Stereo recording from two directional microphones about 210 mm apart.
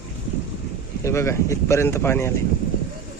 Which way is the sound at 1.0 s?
15° left (ahead or behind).